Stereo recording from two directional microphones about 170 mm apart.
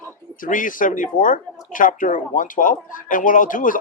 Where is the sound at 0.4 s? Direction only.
50° left (ahead or behind).